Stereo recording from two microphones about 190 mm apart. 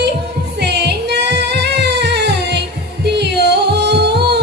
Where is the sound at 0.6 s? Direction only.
60° right (ahead or behind).